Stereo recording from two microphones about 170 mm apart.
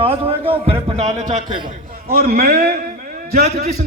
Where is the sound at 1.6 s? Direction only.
60° right (ahead or behind).